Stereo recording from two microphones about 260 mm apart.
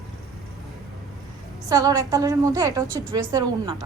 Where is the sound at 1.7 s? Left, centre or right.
Centre.